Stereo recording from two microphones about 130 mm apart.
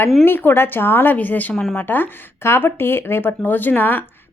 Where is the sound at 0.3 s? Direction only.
15° left (ahead or behind).